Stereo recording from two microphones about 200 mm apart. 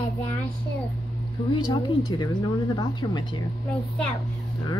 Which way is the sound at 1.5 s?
20° left (ahead or behind).